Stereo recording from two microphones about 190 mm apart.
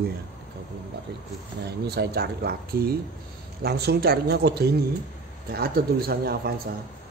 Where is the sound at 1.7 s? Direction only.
55° right (ahead or behind).